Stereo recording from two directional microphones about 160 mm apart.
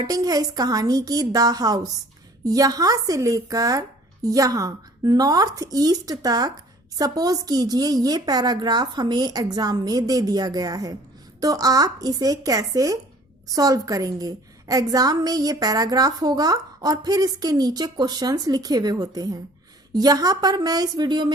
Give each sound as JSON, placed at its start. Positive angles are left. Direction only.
{"t": 0.0, "sound": "a woman's voice", "side_deg": -20}